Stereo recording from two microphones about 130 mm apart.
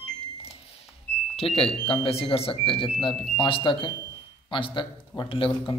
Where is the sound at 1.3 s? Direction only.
50° left (ahead or behind).